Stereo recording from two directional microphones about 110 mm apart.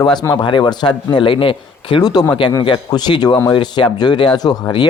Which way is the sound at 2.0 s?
40° left (ahead or behind).